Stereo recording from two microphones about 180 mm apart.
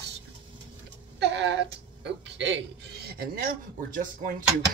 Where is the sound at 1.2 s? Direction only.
75° right (ahead or behind).